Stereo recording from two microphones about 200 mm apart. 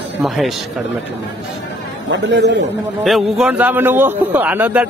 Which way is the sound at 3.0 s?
Centre (ahead or behind).